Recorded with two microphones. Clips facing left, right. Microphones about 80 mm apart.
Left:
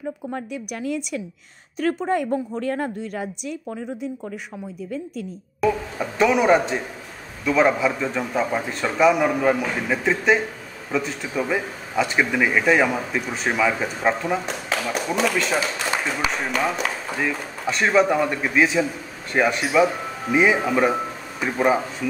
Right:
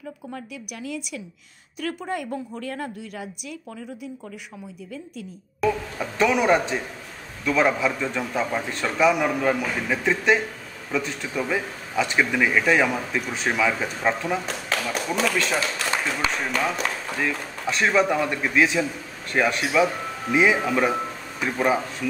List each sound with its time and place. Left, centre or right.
0.3 s a woman's voice: left
2.6 s speech: left
5.6 s a man's voice: centre